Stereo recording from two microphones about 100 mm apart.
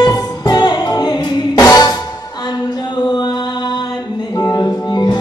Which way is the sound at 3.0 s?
45° left (ahead or behind).